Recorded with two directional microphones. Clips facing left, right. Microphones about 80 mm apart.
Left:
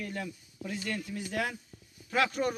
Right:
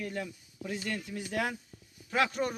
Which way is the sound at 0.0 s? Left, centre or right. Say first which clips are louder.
Right 1 dB; centre.